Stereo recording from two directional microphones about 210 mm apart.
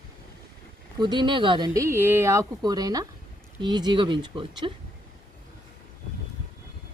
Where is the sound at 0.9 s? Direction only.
20° right (ahead or behind).